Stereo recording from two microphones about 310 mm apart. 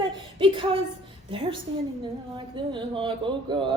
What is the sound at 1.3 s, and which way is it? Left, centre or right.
Speech, centre.